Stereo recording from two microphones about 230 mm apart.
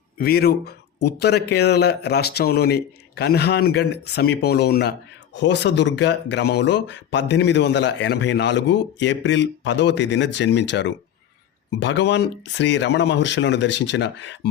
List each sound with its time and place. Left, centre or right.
0.2 s a man's voice: left